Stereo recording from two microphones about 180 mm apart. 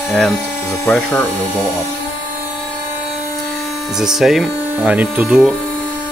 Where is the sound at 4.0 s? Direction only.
Centre (ahead or behind).